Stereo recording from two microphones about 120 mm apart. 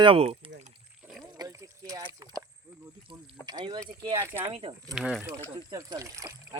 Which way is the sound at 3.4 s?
35° right (ahead or behind).